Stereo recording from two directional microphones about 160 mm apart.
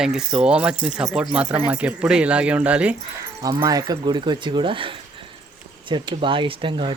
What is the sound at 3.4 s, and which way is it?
Speech, 20° right (ahead or behind).